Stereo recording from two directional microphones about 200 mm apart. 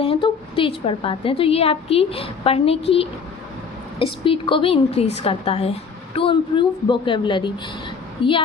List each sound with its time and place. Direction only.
0.0 s a woman's voice: 25° left (ahead or behind)